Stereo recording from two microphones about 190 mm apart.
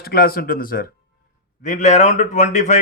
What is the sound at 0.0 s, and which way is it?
A man's voice, 50° left (ahead or behind).